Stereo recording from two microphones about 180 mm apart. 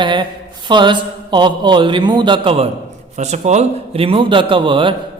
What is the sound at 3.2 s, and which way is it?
A man's voice, 40° right (ahead or behind).